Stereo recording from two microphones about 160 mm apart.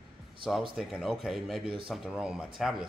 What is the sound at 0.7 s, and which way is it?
Speech, 5° right (ahead or behind).